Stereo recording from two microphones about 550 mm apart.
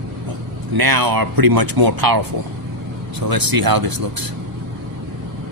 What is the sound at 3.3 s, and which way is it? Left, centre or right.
Speech, right.